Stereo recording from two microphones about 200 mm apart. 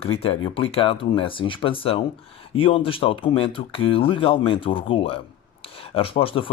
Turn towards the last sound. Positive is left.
turn(degrees=25)  # may be behind; listen again after turning